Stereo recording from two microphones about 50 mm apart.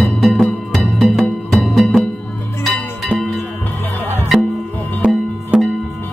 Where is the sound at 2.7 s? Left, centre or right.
Left.